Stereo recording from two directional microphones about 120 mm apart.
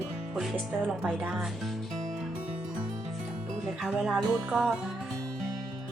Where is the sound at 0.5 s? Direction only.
15° right (ahead or behind).